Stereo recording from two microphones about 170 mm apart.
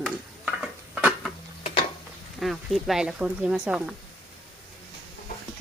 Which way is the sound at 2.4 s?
Centre (ahead or behind).